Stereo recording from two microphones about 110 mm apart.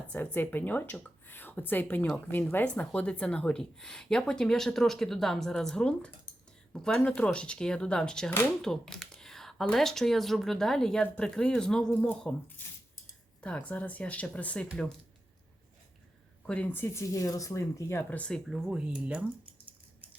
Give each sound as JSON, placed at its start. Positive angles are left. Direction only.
{"t": 0.1, "sound": "speech", "side_deg": 20}
{"t": 16.5, "sound": "speech", "side_deg": 15}
{"t": 18.2, "sound": "speech", "side_deg": 5}
{"t": 18.5, "sound": "speech", "side_deg": -5}